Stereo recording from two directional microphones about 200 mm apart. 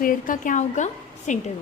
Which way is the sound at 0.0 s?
45° left (ahead or behind).